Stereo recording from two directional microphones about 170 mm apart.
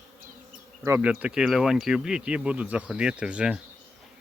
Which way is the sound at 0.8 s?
15° right (ahead or behind).